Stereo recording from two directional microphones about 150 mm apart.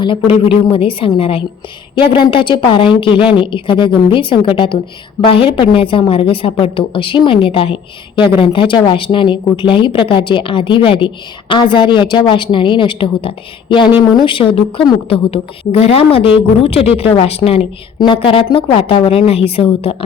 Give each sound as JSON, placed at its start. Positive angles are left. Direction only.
{"t": 0.0, "sound": "a woman's voice", "side_deg": 35}